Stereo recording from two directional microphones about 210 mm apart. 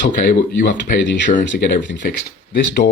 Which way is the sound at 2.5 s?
55° left (ahead or behind).